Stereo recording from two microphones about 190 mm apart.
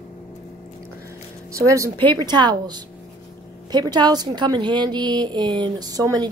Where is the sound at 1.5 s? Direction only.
15° right (ahead or behind).